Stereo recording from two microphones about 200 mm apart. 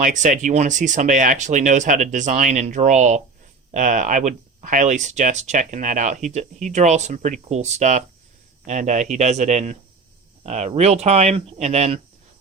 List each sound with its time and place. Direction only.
0.0 s speech: 40° right (ahead or behind)